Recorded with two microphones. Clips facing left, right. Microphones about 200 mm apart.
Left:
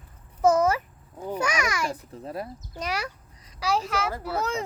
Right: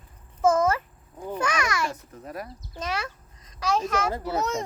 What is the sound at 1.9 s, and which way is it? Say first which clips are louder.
Speech: left 3 dB; 30° left (ahead or behind).